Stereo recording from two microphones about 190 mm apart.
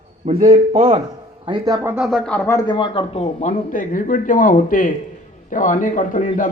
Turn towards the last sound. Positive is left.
turn(degrees=45)  # may be behind; listen again after turning